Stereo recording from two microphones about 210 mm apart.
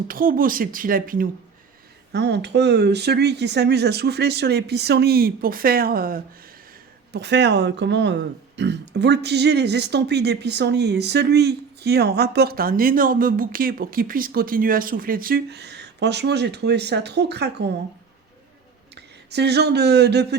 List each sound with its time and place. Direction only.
0.1 s speech: 40° right (ahead or behind)
2.1 s speech: 55° right (ahead or behind)
7.1 s speech: 55° right (ahead or behind)
18.9 s speech: 55° right (ahead or behind)